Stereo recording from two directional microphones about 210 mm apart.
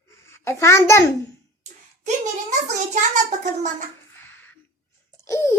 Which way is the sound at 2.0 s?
35° right (ahead or behind).